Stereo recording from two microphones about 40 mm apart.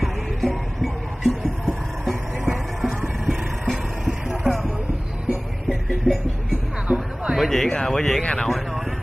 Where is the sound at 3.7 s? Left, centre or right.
Centre.